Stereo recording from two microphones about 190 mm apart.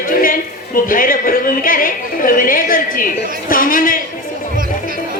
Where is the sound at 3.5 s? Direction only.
45° left (ahead or behind).